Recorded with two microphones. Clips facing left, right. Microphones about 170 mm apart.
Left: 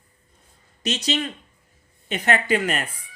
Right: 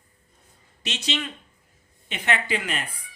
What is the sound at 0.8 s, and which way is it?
A man's voice, 40° left (ahead or behind).